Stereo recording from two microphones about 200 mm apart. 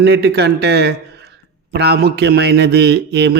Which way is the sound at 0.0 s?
55° right (ahead or behind).